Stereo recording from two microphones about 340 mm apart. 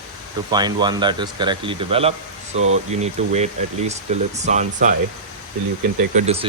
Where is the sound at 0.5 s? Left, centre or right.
Centre.